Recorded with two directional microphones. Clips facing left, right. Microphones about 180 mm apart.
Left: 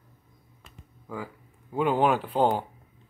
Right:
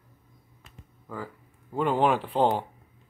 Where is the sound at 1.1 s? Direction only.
10° left (ahead or behind).